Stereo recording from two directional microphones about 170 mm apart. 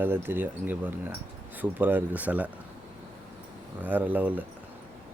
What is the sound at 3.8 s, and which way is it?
Speech, 10° right (ahead or behind).